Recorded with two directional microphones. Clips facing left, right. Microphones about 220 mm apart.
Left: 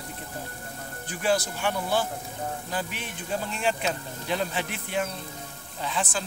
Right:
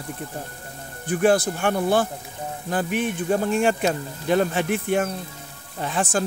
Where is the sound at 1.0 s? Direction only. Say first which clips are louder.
Right 8 dB; 55° right (ahead or behind).